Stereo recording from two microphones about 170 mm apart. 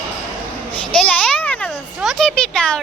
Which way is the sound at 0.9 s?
5° left (ahead or behind).